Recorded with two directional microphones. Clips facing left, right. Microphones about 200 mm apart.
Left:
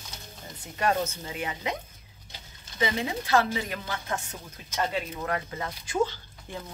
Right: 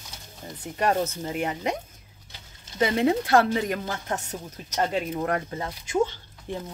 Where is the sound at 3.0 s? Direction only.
55° right (ahead or behind).